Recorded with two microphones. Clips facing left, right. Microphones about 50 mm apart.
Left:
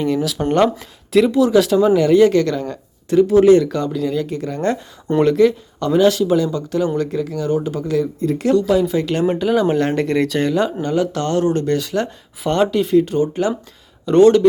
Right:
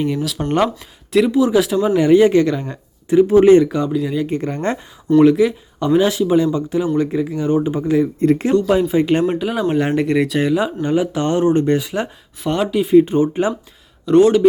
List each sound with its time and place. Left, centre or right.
0.0 s speech: centre; by 3.7 s right
3.7 s speech: centre
4.3 s speech: right
5.2 s speech: centre
9.2 s speech: centre
12.4 s speech: centre
12.9 s speech: right
14.0 s speech: centre